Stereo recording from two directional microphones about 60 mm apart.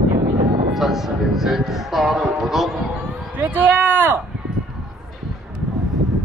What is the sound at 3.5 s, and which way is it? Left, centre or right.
Speech, right.